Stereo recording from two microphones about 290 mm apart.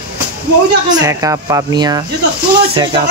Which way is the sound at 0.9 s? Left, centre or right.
Centre.